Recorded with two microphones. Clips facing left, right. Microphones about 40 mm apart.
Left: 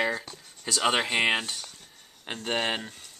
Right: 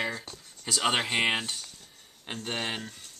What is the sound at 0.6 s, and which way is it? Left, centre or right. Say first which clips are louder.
Speech: left 2 dB; centre.